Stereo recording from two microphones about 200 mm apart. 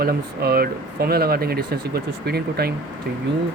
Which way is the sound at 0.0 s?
50° right (ahead or behind).